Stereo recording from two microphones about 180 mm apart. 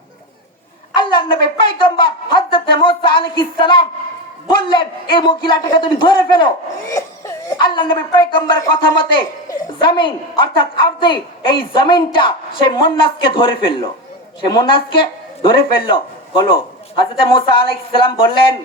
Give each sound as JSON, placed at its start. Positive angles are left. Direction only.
{"t": 0.9, "sound": "a man's voice", "side_deg": 25}